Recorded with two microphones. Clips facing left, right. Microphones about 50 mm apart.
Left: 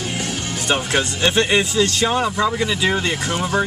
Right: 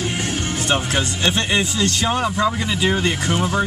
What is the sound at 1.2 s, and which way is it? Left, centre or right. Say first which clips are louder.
Speech: left 3 dB; centre.